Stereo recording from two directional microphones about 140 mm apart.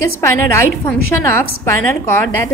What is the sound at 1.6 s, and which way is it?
Speech, 20° left (ahead or behind).